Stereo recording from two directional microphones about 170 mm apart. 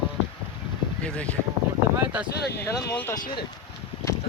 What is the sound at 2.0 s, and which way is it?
Speech, 10° right (ahead or behind).